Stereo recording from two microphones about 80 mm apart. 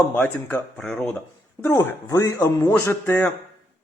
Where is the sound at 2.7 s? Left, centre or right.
Left.